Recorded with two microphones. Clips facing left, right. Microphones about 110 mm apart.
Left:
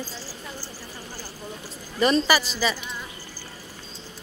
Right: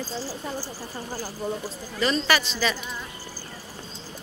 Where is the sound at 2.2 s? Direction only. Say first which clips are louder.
Left 1 dB; 5° left (ahead or behind).